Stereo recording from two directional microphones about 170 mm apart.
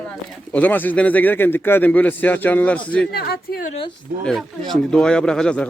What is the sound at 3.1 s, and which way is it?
Speech, 70° left (ahead or behind).